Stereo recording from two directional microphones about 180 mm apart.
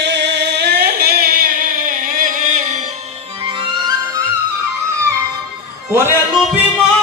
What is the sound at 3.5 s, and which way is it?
Music, 30° right (ahead or behind).